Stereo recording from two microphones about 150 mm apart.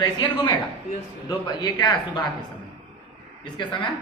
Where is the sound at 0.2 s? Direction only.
30° left (ahead or behind).